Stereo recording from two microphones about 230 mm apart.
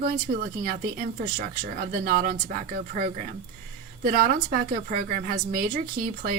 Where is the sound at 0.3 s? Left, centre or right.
Right.